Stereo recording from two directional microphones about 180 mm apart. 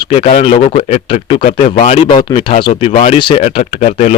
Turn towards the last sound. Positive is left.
turn(degrees=40)  # may be behind; listen again after turning